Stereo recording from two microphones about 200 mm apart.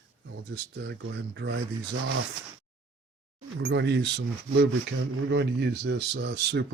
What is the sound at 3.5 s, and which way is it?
Speech, 60° right (ahead or behind).